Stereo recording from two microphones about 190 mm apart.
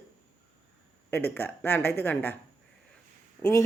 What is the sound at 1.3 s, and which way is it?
A woman's voice, 10° left (ahead or behind).